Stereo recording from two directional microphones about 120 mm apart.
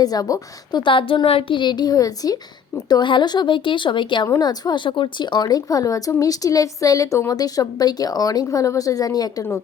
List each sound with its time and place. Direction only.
0.0 s speech: 30° left (ahead or behind)